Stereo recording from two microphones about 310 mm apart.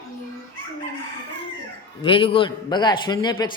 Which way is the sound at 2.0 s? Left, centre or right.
Centre.